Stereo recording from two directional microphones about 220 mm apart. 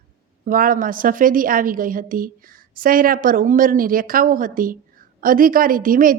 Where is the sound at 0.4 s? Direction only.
40° right (ahead or behind).